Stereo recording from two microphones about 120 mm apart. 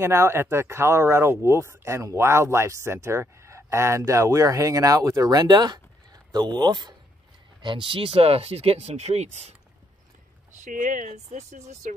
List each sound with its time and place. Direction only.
0.0 s speech: 20° right (ahead or behind); by 9.6 s 65° right (ahead or behind)
10.5 s speech: 90° right; by 11.9 s 70° right (ahead or behind)